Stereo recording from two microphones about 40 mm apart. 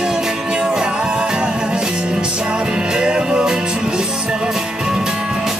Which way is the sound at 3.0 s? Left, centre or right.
Right.